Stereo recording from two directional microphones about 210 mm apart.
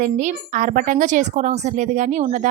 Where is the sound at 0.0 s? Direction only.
35° right (ahead or behind).